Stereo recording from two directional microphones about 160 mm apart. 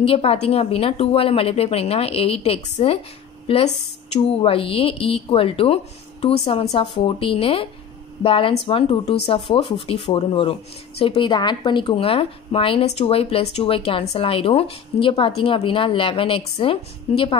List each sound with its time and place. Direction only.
0.0 s a woman's voice: 35° left (ahead or behind)